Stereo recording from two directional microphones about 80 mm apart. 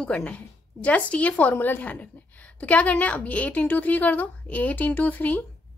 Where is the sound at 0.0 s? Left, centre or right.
Centre.